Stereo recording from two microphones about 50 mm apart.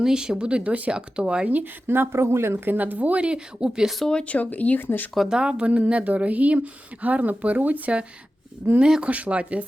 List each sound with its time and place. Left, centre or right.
0.0 s speech: centre
1.9 s speech: right
2.6 s speech: right; by 3.9 s centre
4.1 s speech: centre
4.4 s speech: left
5.3 s speech: centre
8.8 s speech: centre